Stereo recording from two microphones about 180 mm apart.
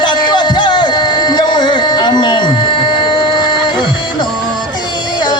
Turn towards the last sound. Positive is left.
turn(degrees=25)  # may be behind; listen again after turning